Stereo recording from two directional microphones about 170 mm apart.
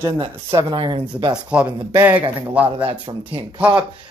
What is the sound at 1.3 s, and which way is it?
Speech, 5° right (ahead or behind).